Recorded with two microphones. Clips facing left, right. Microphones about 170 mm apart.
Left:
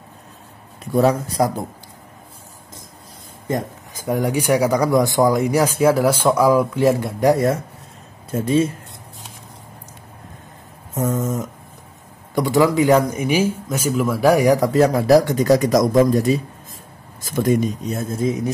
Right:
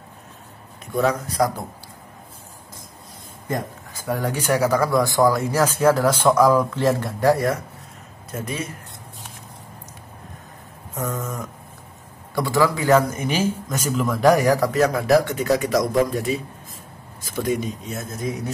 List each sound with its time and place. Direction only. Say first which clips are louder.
0.9 s a man's voice: left 4 dB; 30° left (ahead or behind)
3.4 s a man's voice: left 3 dB; 20° left (ahead or behind)
11.0 s a man's voice: left 6 dB; 25° left (ahead or behind)
14.7 s speech: left 4 dB; 30° left (ahead or behind)
17.4 s speech: left 6 dB; 45° left (ahead or behind)
17.9 s a man's voice: left 6 dB; 30° left (ahead or behind)